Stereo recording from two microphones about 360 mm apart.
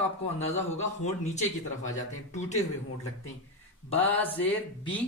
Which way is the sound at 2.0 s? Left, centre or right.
Centre.